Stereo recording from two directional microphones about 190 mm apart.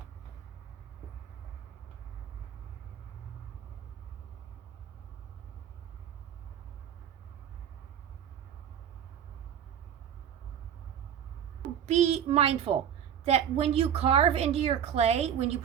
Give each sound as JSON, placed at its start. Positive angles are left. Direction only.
{"t": 11.9, "sound": "a woman's voice", "side_deg": -35}